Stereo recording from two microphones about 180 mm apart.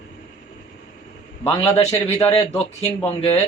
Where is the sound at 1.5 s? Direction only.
35° left (ahead or behind).